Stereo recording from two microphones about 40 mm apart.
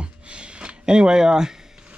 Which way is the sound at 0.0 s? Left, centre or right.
Right.